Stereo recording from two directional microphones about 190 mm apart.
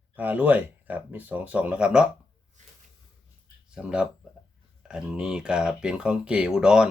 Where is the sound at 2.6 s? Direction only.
40° right (ahead or behind).